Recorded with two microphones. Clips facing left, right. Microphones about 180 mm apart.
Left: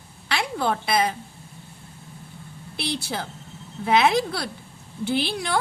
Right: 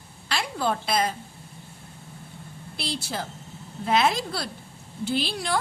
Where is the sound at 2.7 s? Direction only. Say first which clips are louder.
Left 3 dB; 60° left (ahead or behind).